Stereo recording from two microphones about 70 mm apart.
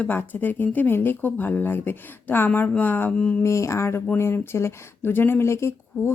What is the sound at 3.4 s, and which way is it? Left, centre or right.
Speech, left.